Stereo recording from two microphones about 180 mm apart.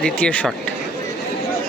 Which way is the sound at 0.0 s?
5° left (ahead or behind).